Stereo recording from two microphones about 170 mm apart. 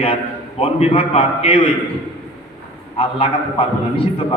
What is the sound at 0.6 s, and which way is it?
A man's voice, 35° left (ahead or behind).